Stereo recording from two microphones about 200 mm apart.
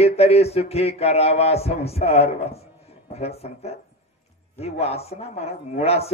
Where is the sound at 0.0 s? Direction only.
30° left (ahead or behind).